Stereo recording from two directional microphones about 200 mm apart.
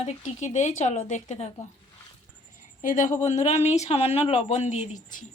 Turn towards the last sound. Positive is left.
turn(degrees=35)  # may be behind; listen again after turning